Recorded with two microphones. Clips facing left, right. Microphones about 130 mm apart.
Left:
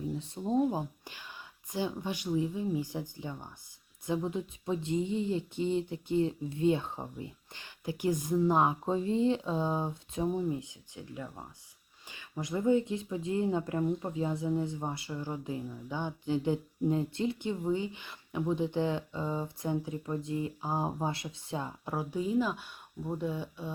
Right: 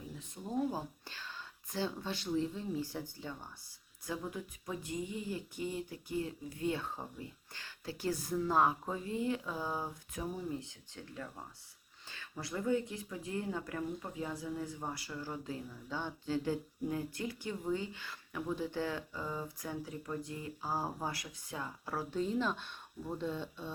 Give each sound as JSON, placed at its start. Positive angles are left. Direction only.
{"t": 0.2, "sound": "speech", "side_deg": 25}